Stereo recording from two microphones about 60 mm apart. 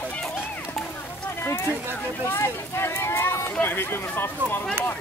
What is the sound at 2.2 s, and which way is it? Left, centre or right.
Speech, left.